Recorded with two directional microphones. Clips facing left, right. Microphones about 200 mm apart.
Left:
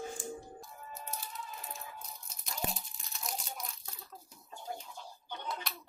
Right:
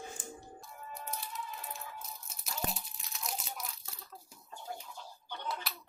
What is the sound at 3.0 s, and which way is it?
Crunch, centre (ahead or behind).